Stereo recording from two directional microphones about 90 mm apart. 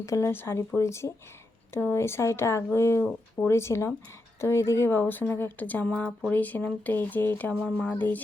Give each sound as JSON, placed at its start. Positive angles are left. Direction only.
{"t": 0.2, "sound": "speech", "side_deg": 25}